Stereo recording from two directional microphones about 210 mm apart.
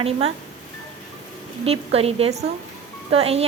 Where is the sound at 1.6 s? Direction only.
30° right (ahead or behind).